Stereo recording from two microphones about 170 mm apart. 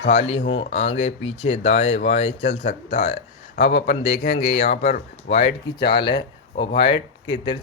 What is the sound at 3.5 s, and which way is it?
Speech, 80° left.